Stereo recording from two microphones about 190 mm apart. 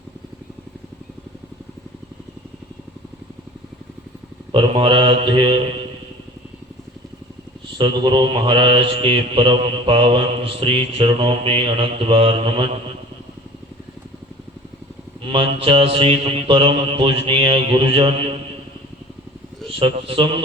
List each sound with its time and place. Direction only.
4.5 s mantra: 25° right (ahead or behind)
7.8 s mantra: 25° right (ahead or behind)
15.2 s mantra: 30° right (ahead or behind)
19.6 s a man's voice: 25° right (ahead or behind)